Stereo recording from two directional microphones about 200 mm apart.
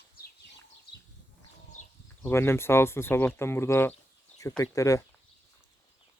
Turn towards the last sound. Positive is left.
turn(degrees=15)  # may be behind; listen again after turning